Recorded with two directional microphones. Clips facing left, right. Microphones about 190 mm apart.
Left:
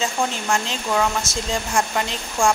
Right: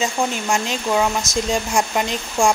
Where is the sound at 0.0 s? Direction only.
15° right (ahead or behind).